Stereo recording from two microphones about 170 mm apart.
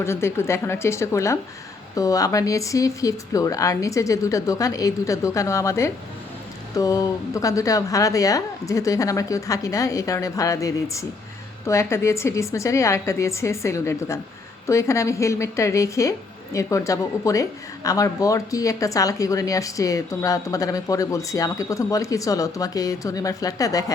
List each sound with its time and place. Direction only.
0.0 s a woman's voice: 15° left (ahead or behind)